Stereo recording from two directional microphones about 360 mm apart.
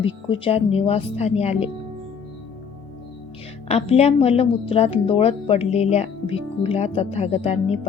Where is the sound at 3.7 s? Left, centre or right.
Centre.